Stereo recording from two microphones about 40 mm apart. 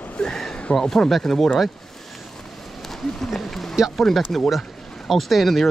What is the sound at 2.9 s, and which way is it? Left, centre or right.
Speech, centre.